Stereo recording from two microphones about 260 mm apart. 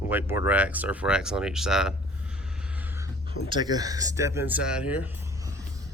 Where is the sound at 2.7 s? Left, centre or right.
Centre.